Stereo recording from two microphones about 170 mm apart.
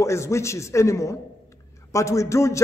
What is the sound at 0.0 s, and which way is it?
A man's voice, 15° left (ahead or behind).